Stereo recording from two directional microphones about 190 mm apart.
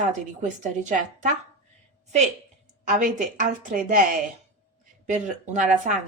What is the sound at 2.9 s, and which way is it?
Speech, 45° right (ahead or behind).